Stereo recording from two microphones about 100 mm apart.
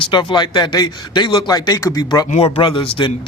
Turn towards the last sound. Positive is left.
turn(degrees=55)  # may be behind; listen again after turning